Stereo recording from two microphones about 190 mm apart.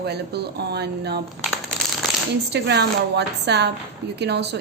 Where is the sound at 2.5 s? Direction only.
60° right (ahead or behind).